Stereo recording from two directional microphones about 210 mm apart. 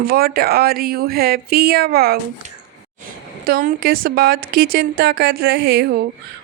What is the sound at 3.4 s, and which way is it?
Speech, 40° right (ahead or behind).